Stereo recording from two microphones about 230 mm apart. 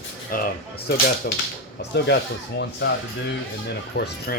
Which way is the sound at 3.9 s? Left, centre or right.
Left.